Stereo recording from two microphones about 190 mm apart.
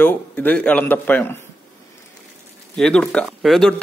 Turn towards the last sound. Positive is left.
turn(degrees=0)  # may be behind; listen again after turning